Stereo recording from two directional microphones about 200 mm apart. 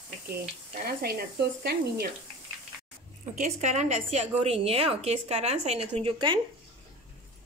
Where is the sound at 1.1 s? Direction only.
50° right (ahead or behind).